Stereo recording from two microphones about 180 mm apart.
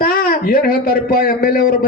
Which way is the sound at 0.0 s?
55° left (ahead or behind).